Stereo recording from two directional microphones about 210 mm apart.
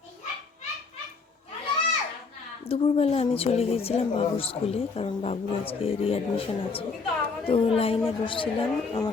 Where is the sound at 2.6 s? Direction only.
25° left (ahead or behind).